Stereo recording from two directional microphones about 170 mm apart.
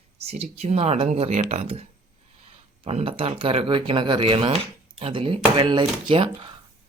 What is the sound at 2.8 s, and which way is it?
Speech, 35° right (ahead or behind).